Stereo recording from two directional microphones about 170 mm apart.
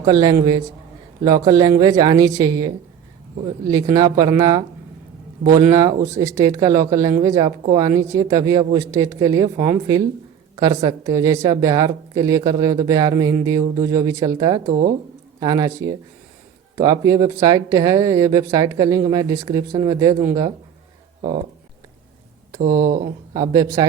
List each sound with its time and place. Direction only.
0.0 s a woman's voice: 25° right (ahead or behind)
14.7 s speech: 60° right (ahead or behind)
15.4 s speech: 20° right (ahead or behind)
22.6 s speech: 55° right (ahead or behind)
23.3 s speech: 20° right (ahead or behind)